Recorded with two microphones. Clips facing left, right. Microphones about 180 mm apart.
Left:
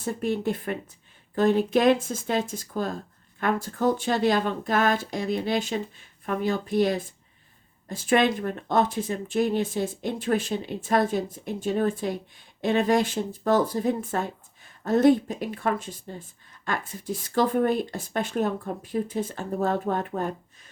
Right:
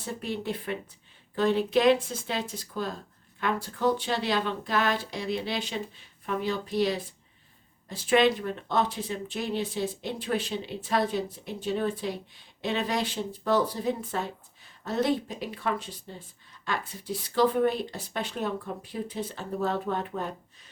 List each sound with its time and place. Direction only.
0.0 s speech: 45° left (ahead or behind)